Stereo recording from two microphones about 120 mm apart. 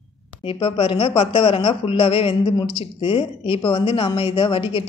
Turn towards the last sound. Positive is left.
turn(degrees=45)  # may be behind; listen again after turning